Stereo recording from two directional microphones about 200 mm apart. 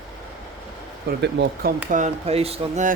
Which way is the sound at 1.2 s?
60° right (ahead or behind).